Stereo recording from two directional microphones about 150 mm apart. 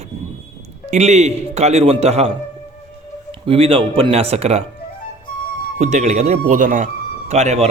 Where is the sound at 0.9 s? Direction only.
50° right (ahead or behind).